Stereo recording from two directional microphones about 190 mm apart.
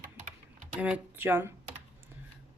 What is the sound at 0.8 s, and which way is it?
Speech, 10° right (ahead or behind).